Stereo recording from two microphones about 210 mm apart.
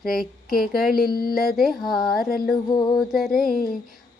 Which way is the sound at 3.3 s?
45° left (ahead or behind).